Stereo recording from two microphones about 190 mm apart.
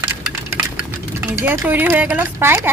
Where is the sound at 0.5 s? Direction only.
10° right (ahead or behind).